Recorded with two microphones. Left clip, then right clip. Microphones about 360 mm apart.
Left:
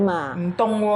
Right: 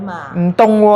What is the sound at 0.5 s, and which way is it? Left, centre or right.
Speech, right.